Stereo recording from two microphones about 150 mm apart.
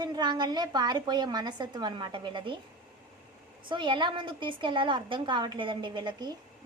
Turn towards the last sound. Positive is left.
turn(degrees=-30)  # may be behind; listen again after turning